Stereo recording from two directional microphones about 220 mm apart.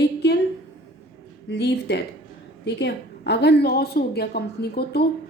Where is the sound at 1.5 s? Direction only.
50° left (ahead or behind).